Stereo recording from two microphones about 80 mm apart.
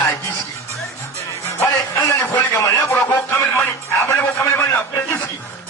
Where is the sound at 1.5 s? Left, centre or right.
Left.